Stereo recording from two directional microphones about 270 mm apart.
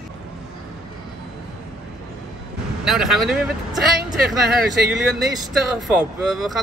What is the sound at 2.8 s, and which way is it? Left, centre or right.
Speech, centre.